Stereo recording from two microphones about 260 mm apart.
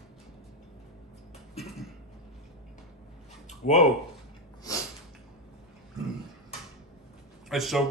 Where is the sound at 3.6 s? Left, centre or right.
Left.